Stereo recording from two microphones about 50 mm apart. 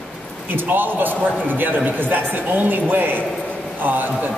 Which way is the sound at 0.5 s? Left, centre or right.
Right.